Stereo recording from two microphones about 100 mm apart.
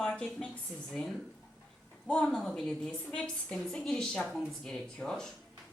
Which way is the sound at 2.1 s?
5° left (ahead or behind).